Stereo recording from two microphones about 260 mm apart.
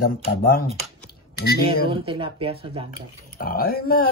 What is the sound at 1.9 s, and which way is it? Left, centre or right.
Speech, right.